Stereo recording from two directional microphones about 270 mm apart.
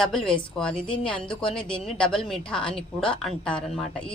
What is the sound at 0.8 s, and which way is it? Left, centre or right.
Speech, centre.